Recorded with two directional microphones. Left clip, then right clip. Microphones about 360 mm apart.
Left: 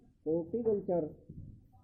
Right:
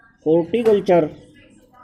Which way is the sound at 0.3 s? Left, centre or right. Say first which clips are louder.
Right 16 dB; right.